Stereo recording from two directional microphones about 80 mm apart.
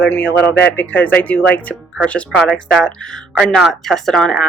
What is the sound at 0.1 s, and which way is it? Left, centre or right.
Speech, left.